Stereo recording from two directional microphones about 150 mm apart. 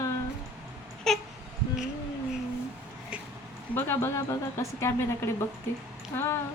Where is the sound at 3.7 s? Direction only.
15° left (ahead or behind).